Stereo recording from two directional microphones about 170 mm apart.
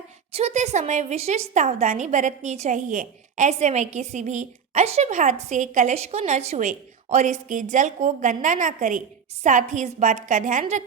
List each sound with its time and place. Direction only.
0.3 s a woman's voice: 40° right (ahead or behind)